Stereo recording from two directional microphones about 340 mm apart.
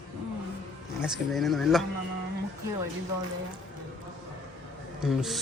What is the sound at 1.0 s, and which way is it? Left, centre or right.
Speech, centre.